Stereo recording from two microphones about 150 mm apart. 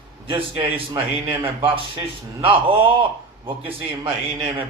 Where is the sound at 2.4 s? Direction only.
35° right (ahead or behind).